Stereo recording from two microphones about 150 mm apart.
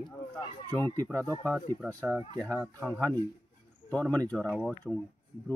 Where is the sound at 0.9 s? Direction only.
15° left (ahead or behind).